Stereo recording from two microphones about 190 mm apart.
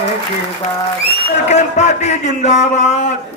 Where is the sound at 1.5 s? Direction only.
35° left (ahead or behind).